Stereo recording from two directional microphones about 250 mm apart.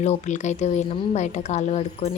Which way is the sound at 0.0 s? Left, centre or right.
Left.